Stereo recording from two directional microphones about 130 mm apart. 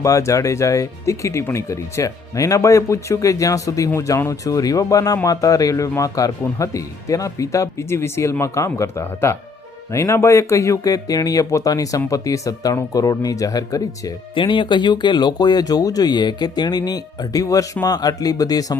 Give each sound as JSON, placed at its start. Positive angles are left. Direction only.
{"t": 0.0, "sound": "speech", "side_deg": 25}
{"t": 14.3, "sound": "speech", "side_deg": 40}